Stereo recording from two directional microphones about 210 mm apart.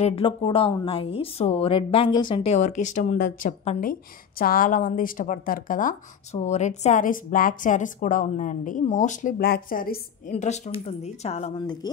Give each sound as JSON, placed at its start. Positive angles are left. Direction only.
{"t": 0.0, "sound": "speech", "side_deg": 25}